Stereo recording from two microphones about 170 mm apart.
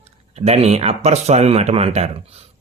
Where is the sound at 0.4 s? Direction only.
40° right (ahead or behind).